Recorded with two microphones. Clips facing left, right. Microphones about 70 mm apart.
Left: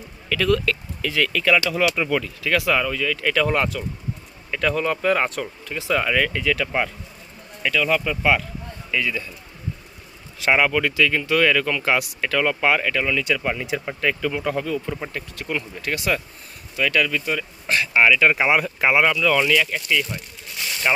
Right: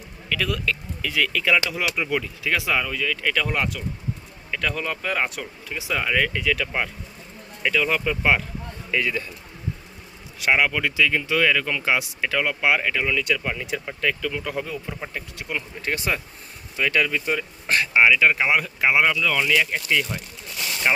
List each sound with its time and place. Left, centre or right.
0.3 s speech: centre
2.8 s speech: centre
7.6 s speech: right
8.9 s speech: right
10.4 s speech: centre
13.1 s speech: centre
14.5 s speech: centre
15.8 s speech: right
17.9 s speech: centre
18.5 s speech: centre
19.7 s speech: centre